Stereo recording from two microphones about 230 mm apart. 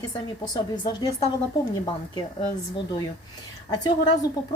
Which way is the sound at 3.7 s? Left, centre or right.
Centre.